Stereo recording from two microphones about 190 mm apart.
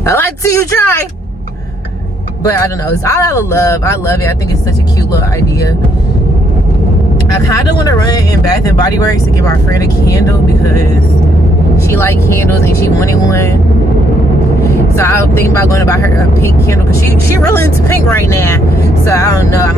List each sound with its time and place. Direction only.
0.0 s speech: 15° left (ahead or behind)
2.6 s speech: 15° left (ahead or behind)
7.4 s speech: 15° left (ahead or behind)
12.0 s speech: 15° left (ahead or behind)
14.6 s speech: 15° left (ahead or behind)
18.3 s speech: 15° left (ahead or behind)